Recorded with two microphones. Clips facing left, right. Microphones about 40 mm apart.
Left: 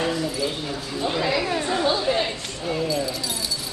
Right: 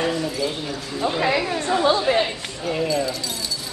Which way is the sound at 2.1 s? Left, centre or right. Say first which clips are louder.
Right 3 dB; right.